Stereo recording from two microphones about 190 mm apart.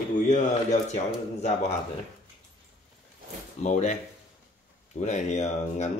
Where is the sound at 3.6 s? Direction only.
35° left (ahead or behind).